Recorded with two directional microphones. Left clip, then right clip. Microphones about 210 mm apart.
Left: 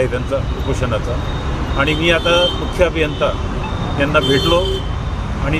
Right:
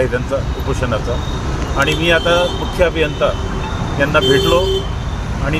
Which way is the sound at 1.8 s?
15° left (ahead or behind).